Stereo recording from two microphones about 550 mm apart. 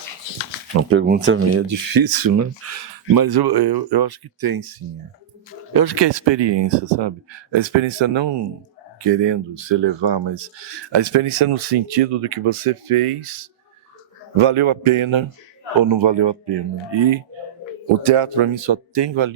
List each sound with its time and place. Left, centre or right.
0.8 s speech: right
1.9 s speech: right
2.6 s speech: right
5.7 s speech: right
18.0 s speech: right